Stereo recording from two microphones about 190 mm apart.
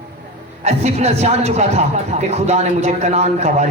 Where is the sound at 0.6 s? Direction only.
35° right (ahead or behind).